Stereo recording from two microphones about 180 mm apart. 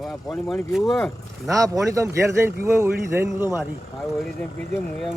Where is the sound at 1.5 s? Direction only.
20° right (ahead or behind).